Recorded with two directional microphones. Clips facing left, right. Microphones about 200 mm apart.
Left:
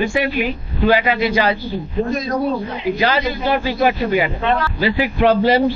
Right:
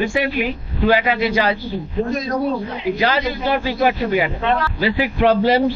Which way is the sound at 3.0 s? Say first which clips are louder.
Left 1 dB; 20° left (ahead or behind).